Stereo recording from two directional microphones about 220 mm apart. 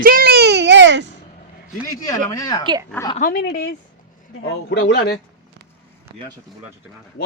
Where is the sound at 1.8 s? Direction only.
40° left (ahead or behind).